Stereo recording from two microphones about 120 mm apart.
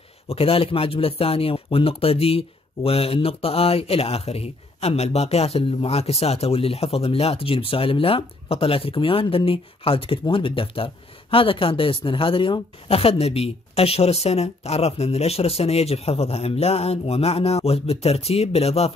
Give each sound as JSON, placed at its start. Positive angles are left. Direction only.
{"t": 0.3, "sound": "speech", "side_deg": 50}